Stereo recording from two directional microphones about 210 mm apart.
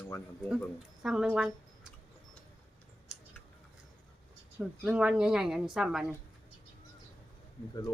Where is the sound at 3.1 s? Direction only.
Centre (ahead or behind).